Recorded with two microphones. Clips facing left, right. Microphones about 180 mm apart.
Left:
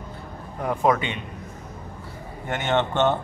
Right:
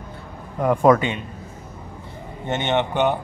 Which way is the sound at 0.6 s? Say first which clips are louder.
Right 6 dB; 55° right (ahead or behind).